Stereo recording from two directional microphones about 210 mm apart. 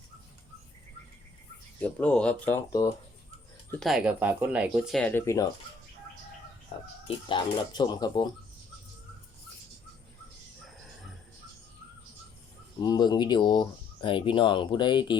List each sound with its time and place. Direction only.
1.8 s speech: 5° left (ahead or behind)
3.7 s speech: centre (ahead or behind)
4.9 s speech: 10° left (ahead or behind)
6.7 s speech: 25° left (ahead or behind)
12.8 s speech: 20° left (ahead or behind)